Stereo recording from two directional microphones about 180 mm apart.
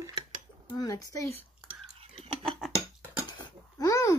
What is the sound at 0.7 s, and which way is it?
Speech, 20° left (ahead or behind).